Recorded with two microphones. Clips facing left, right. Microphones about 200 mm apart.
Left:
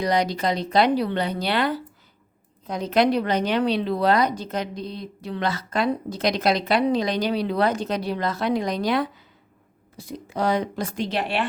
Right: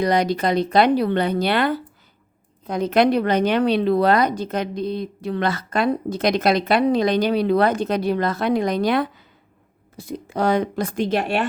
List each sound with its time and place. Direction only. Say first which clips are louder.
0.0 s a woman's voice: right 3 dB; 55° right (ahead or behind)